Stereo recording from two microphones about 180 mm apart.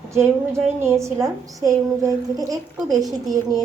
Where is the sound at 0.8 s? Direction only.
15° right (ahead or behind).